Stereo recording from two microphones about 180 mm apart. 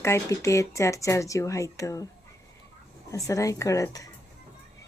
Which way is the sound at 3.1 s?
15° left (ahead or behind).